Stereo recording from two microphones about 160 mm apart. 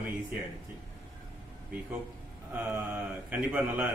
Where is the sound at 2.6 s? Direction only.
10° right (ahead or behind).